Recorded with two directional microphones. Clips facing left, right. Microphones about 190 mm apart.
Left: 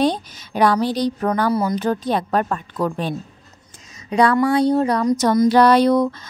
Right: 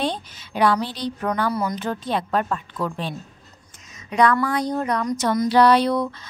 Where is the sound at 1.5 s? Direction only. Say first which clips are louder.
Left 6 dB; 30° left (ahead or behind); by 3.2 s 45° left (ahead or behind).